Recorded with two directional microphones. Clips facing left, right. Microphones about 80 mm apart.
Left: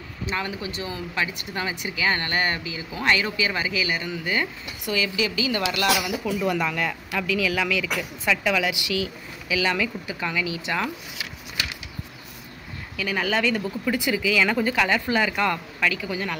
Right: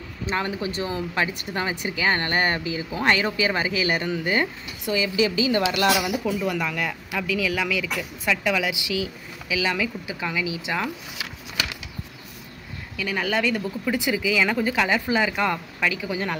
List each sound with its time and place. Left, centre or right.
0.3 s speech: right
6.4 s a woman's voice: centre
12.9 s speech: centre
13.9 s a woman's voice: centre